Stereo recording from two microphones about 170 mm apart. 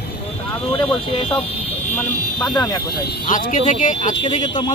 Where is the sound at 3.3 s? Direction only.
50° left (ahead or behind).